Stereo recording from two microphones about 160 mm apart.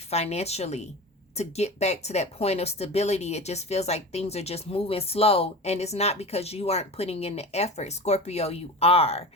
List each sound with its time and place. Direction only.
0.1 s speech: 40° left (ahead or behind)